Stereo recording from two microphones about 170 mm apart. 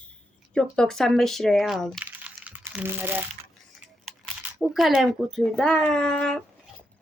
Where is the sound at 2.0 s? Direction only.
10° right (ahead or behind).